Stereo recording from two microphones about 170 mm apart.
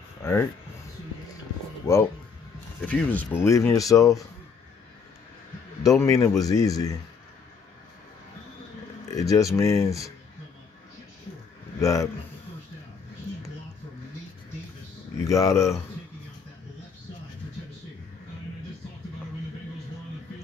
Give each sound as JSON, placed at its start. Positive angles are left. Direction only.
{"t": 0.2, "sound": "speech", "side_deg": 15}
{"t": 1.8, "sound": "speech", "side_deg": 20}
{"t": 2.8, "sound": "speech", "side_deg": 10}
{"t": 5.9, "sound": "speech", "side_deg": 15}
{"t": 9.1, "sound": "speech", "side_deg": 20}
{"t": 11.8, "sound": "speech", "side_deg": 20}
{"t": 15.1, "sound": "speech", "side_deg": 20}